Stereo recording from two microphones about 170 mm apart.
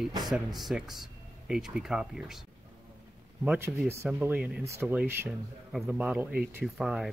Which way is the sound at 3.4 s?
10° right (ahead or behind).